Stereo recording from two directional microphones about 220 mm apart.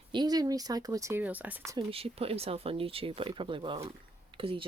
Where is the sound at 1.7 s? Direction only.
25° right (ahead or behind).